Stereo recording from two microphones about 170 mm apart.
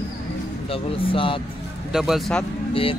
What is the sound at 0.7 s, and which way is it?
Speech, 30° left (ahead or behind).